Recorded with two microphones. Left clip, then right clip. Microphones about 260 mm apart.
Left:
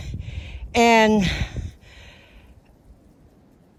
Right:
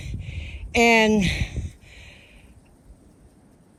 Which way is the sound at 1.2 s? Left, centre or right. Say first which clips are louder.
Even; left.